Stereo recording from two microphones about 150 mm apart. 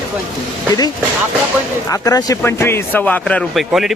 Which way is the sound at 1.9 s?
25° left (ahead or behind).